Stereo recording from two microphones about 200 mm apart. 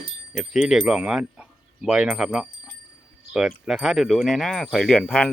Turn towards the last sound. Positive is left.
turn(degrees=5)  # may be behind; listen again after turning